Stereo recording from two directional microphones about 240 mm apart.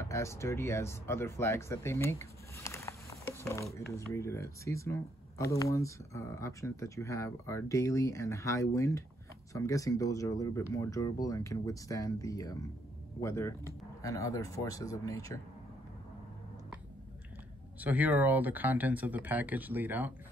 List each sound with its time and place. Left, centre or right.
0.0 s speech: centre
17.7 s speech: centre